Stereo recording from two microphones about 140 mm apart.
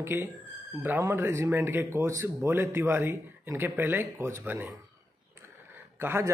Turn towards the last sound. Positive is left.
turn(degrees=-15)  # may be behind; listen again after turning